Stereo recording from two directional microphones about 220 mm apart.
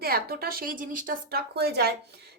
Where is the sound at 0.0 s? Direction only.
45° right (ahead or behind).